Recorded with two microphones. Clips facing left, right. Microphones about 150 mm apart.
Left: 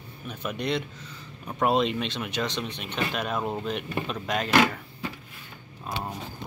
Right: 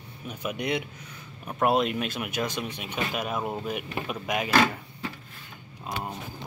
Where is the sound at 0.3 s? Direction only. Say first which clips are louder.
Even; 10° right (ahead or behind).